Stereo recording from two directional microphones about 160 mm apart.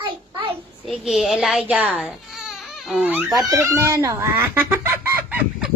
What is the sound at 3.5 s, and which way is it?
Speech, 15° right (ahead or behind).